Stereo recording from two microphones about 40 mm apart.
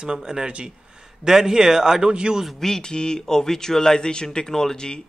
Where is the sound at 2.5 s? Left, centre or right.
Centre.